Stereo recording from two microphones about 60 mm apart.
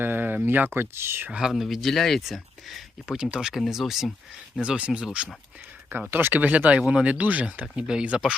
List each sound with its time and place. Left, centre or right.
0.0 s a sound: right
0.4 s speech: right
1.3 s speech: centre
4.6 s speech: centre
6.1 s speech: right
7.6 s speech: centre